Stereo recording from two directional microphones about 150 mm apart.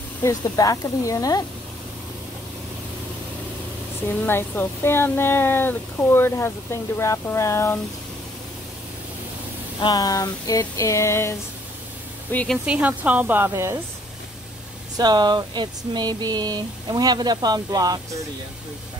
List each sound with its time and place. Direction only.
0.2 s a sound: 25° left (ahead or behind)
4.3 s speech: 15° left (ahead or behind)
9.8 s a sound: 25° left (ahead or behind)
12.3 s speech: 10° left (ahead or behind)
12.6 s speech: 10° right (ahead or behind)
15.0 s speech: 30° right (ahead or behind)